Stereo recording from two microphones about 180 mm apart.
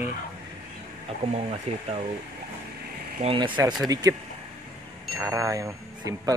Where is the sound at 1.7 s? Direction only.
35° right (ahead or behind).